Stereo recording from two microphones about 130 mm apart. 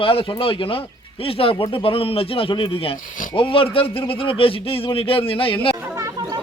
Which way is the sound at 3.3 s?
45° left (ahead or behind).